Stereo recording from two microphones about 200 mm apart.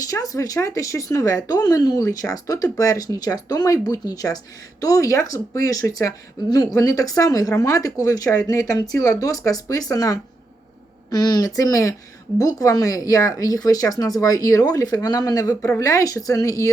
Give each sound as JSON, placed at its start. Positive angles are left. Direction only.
{"t": 0.0, "sound": "speech", "side_deg": 15}